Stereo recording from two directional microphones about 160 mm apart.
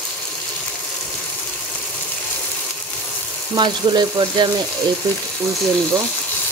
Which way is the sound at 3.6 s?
30° right (ahead or behind).